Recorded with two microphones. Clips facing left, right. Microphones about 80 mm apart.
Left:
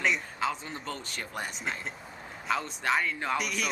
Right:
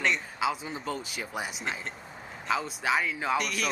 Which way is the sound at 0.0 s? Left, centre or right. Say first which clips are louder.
Right 1 dB; centre.